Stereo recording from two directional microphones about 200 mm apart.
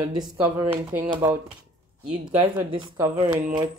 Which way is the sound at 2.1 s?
25° right (ahead or behind).